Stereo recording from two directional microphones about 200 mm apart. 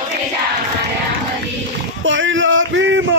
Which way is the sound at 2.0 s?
70° right (ahead or behind).